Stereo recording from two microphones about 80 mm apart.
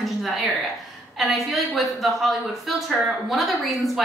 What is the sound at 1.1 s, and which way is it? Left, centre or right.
A woman's voice, centre.